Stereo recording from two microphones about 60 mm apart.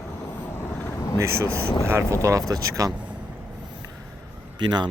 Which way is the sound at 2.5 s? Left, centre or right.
Right.